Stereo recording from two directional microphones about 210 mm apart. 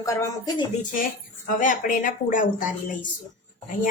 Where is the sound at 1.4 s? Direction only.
40° left (ahead or behind).